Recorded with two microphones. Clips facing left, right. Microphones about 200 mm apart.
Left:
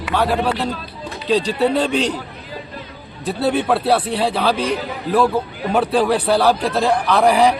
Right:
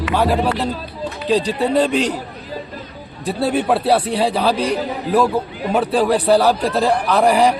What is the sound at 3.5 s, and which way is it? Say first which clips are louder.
Speech: right 2 dB; 5° right (ahead or behind).